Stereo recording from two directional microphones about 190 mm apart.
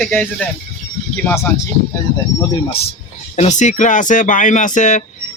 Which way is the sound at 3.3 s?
40° left (ahead or behind).